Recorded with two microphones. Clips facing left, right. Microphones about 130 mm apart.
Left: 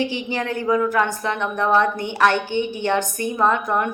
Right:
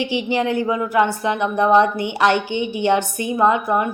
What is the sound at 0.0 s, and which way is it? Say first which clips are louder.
A woman's voice: right 4 dB; 15° right (ahead or behind).